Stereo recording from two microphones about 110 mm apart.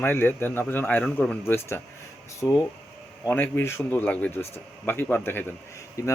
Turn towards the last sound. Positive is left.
turn(degrees=30)  # may be behind; listen again after turning